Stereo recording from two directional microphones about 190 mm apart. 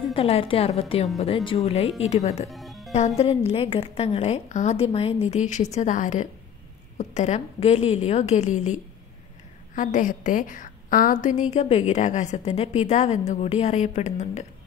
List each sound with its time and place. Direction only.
0.0 s a woman's voice: 30° left (ahead or behind)
2.5 s music: centre (ahead or behind)
3.2 s a woman's voice: 30° left (ahead or behind)
9.8 s a woman's voice: 40° left (ahead or behind)